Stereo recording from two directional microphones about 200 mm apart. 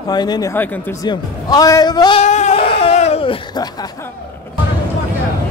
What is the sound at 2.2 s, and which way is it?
Baby cry, 35° left (ahead or behind).